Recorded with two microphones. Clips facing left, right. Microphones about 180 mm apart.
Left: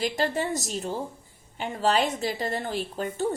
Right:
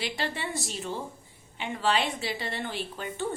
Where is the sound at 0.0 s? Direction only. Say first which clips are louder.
Left 6 dB; 45° left (ahead or behind).